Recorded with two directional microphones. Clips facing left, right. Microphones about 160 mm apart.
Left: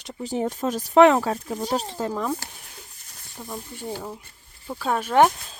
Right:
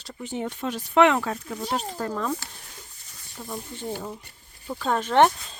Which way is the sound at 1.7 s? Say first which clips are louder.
Even; 25° left (ahead or behind).